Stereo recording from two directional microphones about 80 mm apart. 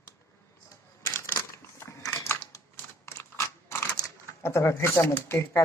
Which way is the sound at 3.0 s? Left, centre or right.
Left.